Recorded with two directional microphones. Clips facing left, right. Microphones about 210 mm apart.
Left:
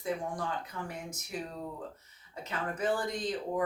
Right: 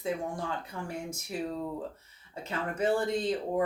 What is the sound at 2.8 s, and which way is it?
Speech, 25° right (ahead or behind).